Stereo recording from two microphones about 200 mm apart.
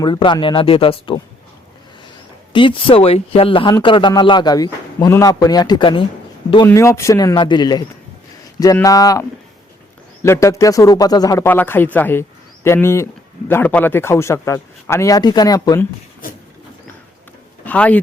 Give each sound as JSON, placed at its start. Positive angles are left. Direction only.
{"t": 0.0, "sound": "speech", "side_deg": 25}
{"t": 2.5, "sound": "a man's voice", "side_deg": 25}
{"t": 10.2, "sound": "a man's voice", "side_deg": 15}
{"t": 17.7, "sound": "speech", "side_deg": 5}